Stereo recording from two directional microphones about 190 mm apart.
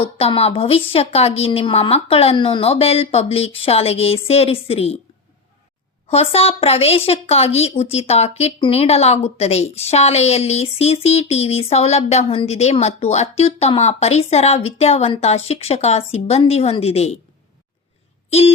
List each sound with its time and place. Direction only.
0.0 s a woman's voice: 30° left (ahead or behind)
6.1 s a woman's voice: 30° left (ahead or behind)
18.3 s speech: 35° left (ahead or behind)